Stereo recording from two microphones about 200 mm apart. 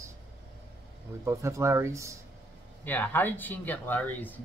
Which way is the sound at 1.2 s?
15° right (ahead or behind).